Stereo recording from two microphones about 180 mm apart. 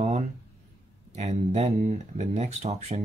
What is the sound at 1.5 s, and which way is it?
Speech, 35° right (ahead or behind).